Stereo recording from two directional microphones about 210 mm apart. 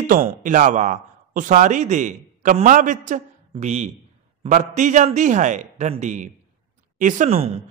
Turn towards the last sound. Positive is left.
turn(degrees=-30)  # may be behind; listen again after turning